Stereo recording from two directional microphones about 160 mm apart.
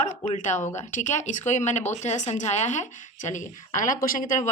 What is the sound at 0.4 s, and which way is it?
Speech, 50° left (ahead or behind).